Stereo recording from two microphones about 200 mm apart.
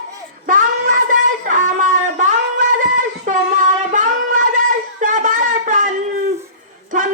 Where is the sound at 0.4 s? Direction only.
40° right (ahead or behind).